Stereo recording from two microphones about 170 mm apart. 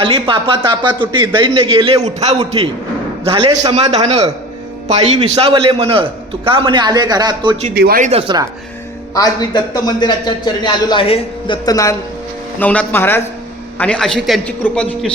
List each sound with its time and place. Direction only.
0.0 s a man's voice: 30° right (ahead or behind)
5.3 s a man's voice: 30° right (ahead or behind)
7.7 s speech: 65° right (ahead or behind)
8.0 s a man's voice: 35° right (ahead or behind)
9.1 s a man's voice: 25° left (ahead or behind)
12.5 s a man's voice: 10° left (ahead or behind)